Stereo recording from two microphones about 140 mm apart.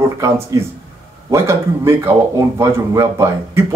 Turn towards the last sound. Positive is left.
turn(degrees=-20)  # may be behind; listen again after turning